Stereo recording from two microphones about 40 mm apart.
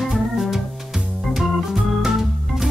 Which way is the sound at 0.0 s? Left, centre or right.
Centre.